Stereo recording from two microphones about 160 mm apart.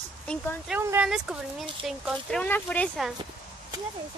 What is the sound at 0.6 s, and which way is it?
Speech, 15° right (ahead or behind).